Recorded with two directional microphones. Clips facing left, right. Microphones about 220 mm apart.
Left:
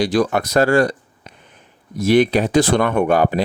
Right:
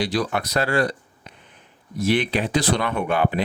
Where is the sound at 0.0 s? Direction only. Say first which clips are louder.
Left 6 dB; 45° left (ahead or behind).